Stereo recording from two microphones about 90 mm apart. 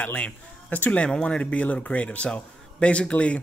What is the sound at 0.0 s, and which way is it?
Speech, 15° left (ahead or behind).